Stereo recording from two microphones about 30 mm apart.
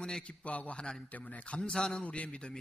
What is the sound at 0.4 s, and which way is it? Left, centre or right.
A man's voice, left.